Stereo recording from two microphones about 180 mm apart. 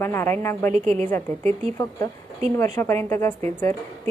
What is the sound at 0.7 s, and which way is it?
Speech, 40° right (ahead or behind).